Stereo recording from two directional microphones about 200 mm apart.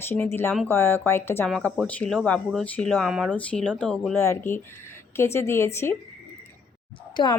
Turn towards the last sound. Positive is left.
turn(degrees=25)  # may be behind; listen again after turning